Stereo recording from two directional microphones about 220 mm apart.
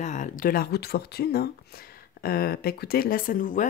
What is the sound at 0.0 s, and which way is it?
Speech, 35° left (ahead or behind).